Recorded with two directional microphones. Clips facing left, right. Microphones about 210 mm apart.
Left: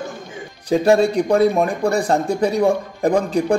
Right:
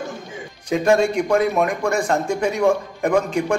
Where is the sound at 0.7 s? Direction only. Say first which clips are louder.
Left 2 dB; 35° left (ahead or behind).